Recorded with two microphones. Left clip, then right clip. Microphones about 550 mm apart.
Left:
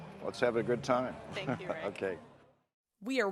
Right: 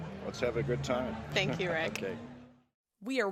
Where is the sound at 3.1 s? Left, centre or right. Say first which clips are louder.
Even; centre.